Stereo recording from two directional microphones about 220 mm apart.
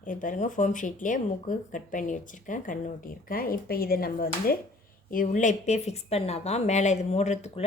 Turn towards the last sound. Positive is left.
turn(degrees=30)  # may be behind; listen again after turning